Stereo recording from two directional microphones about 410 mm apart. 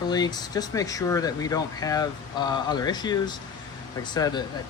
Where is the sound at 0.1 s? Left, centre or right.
Centre.